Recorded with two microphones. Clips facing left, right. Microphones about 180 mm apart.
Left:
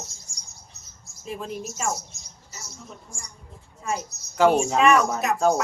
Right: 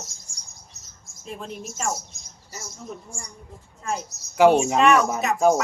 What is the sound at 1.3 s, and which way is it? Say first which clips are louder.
Speech: left 2 dB; 5° left (ahead or behind).